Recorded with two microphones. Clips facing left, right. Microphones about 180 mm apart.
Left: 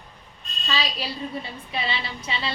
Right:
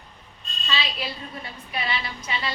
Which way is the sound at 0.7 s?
40° left (ahead or behind).